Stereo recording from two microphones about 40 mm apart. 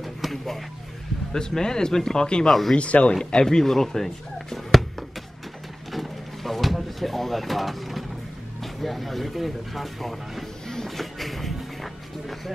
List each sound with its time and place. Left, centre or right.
0.0 s a sound: centre
1.3 s speech: centre
2.4 s speech: centre
2.7 s speech: left
3.3 s speech: centre
5.9 s a sound: centre
8.8 s speech: centre
10.7 s a sound: centre
11.1 s music: centre